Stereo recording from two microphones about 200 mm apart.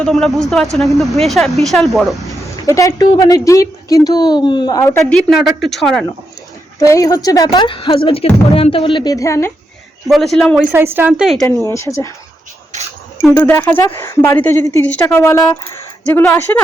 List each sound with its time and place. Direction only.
0.0 s a woman's voice: centre (ahead or behind)
2.6 s a woman's voice: 15° left (ahead or behind)
5.1 s a woman's voice: centre (ahead or behind)
6.7 s a woman's voice: 15° left (ahead or behind)
10.1 s a woman's voice: centre (ahead or behind)
11.6 s speech: 15° left (ahead or behind)
13.3 s speech: 10° left (ahead or behind)